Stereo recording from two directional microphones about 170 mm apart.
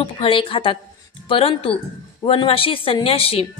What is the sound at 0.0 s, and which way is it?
A woman's voice, 30° left (ahead or behind).